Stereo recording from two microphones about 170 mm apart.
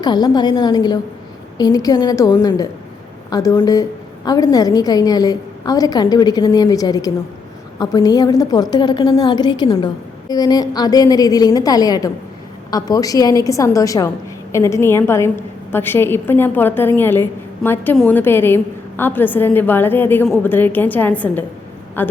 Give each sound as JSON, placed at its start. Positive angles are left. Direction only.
{"t": 0.0, "sound": "a woman's voice", "side_deg": 25}